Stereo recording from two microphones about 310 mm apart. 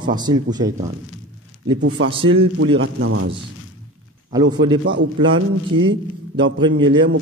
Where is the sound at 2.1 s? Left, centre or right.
Centre.